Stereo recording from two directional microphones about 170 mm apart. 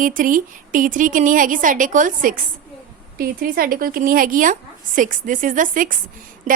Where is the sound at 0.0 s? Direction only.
55° right (ahead or behind).